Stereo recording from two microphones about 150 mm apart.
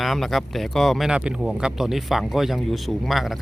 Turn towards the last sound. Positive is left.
turn(degrees=0)  # may be behind; listen again after turning